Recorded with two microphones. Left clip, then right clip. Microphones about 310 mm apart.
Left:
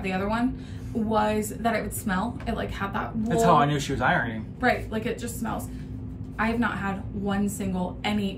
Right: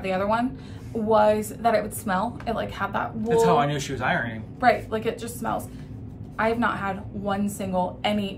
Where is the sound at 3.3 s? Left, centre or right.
Centre.